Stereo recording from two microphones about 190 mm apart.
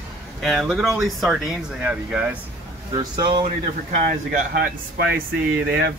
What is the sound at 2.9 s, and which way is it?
Speech, 25° right (ahead or behind).